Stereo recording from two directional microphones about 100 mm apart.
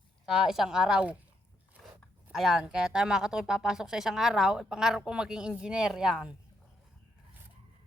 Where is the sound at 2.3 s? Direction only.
5° right (ahead or behind).